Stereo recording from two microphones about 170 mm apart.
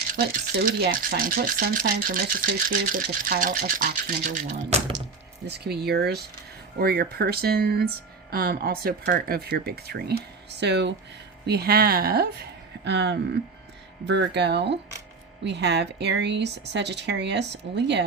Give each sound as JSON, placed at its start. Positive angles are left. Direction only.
{"t": 0.1, "sound": "speech", "side_deg": -60}
{"t": 5.5, "sound": "speech", "side_deg": -70}
{"t": 10.6, "sound": "speech", "side_deg": -90}
{"t": 11.4, "sound": "speech", "side_deg": -70}